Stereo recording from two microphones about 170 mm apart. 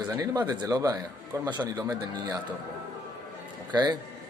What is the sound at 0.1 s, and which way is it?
Speech, 20° right (ahead or behind).